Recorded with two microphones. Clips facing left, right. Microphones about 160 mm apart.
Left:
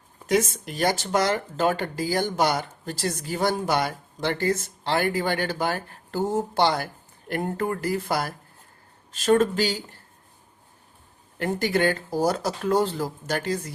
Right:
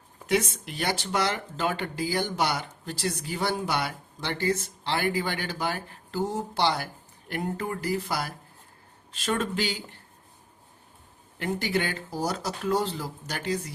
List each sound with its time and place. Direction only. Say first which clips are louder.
0.3 s speech: left 3 dB; 45° left (ahead or behind)
11.3 s speech: left 4 dB; 50° left (ahead or behind)